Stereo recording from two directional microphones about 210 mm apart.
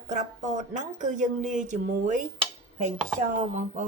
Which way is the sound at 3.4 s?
35° right (ahead or behind).